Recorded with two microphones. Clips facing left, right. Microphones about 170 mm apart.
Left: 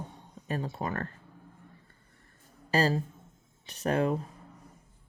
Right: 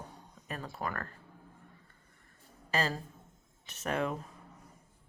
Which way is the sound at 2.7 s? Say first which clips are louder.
Left 6 dB; 35° left (ahead or behind).